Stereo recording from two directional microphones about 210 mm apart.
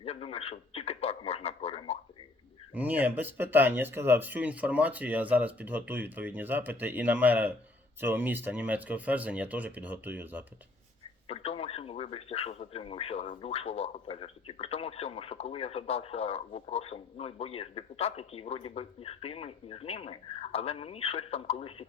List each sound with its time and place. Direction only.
0.0 s a man's voice: 30° left (ahead or behind)
2.7 s speech: 5° right (ahead or behind)
11.3 s a man's voice: 30° left (ahead or behind)